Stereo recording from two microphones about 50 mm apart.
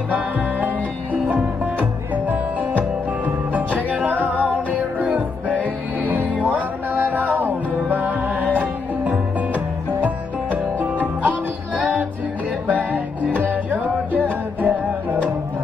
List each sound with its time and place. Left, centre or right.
3.5 s music: right
12.9 s music: right